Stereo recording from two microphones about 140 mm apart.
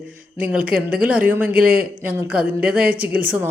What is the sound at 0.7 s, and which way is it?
Speech, 90° right.